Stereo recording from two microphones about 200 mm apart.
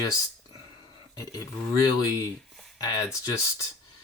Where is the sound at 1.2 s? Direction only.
15° left (ahead or behind).